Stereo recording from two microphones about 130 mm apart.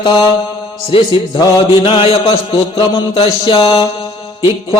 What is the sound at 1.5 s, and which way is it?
Mantra, 40° left (ahead or behind).